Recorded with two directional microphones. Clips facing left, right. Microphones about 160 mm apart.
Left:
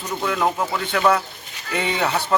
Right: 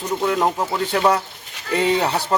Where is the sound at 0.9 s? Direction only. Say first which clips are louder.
Even; 35° right (ahead or behind).